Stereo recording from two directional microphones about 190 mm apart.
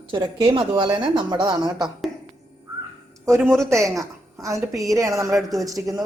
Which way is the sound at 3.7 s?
15° right (ahead or behind).